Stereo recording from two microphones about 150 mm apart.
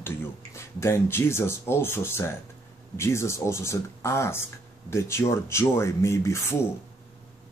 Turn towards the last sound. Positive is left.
turn(degrees=20)  # may be behind; listen again after turning